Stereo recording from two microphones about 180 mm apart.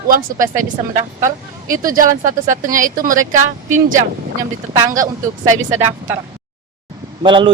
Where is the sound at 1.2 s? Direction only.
50° right (ahead or behind).